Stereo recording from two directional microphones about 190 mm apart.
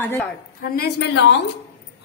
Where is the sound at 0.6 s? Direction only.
55° left (ahead or behind).